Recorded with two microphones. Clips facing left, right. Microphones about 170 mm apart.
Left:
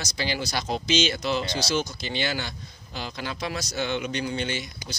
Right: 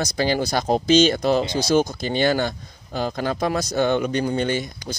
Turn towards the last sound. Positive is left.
turn(degrees=-45)  # may be behind; listen again after turning